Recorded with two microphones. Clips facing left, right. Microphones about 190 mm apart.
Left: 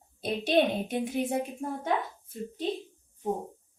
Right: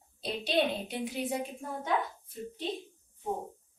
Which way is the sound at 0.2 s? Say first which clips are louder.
Left 5 dB; 50° left (ahead or behind).